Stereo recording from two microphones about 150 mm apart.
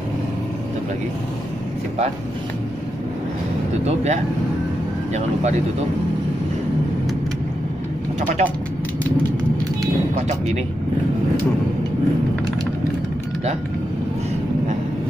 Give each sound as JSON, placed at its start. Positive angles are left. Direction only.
{"t": 3.8, "sound": "speech", "side_deg": -50}
{"t": 8.2, "sound": "speech", "side_deg": -55}
{"t": 10.1, "sound": "speech", "side_deg": -50}